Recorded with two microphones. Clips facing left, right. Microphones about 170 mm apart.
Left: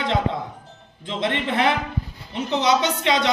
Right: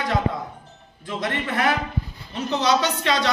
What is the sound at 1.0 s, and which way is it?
A man's voice, 25° left (ahead or behind).